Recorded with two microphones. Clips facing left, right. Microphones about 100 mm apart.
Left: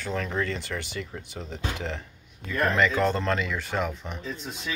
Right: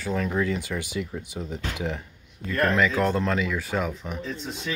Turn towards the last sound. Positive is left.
turn(degrees=0)  # may be behind; listen again after turning